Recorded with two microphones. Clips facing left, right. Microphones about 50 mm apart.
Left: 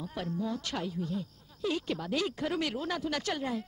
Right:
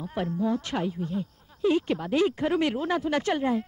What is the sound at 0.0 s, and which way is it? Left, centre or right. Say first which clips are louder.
Speech: right 7 dB; right.